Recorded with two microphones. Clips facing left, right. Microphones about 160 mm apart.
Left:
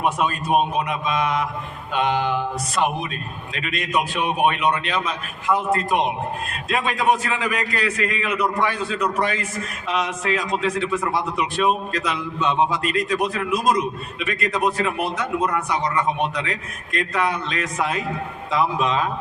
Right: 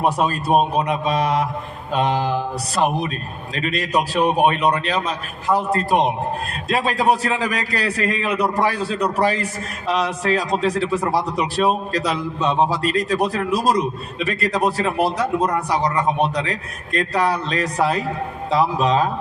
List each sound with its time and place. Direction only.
0.0 s a man's voice: 35° right (ahead or behind)